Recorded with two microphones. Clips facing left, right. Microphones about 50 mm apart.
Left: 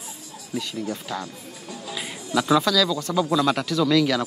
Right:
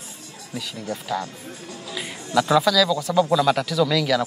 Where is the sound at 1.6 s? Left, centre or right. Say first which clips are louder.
Left 3 dB; right.